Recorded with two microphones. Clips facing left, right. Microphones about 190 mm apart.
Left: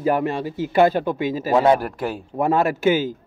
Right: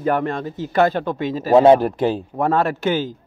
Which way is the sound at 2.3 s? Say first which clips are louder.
Left 4 dB; 10° left (ahead or behind).